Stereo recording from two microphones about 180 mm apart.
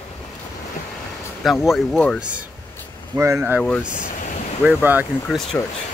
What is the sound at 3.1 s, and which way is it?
Speech, 15° right (ahead or behind).